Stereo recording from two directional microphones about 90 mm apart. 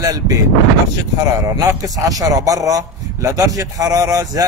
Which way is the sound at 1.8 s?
40° right (ahead or behind).